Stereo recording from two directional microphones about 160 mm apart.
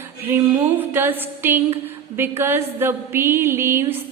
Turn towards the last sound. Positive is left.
turn(degrees=-15)  # may be behind; listen again after turning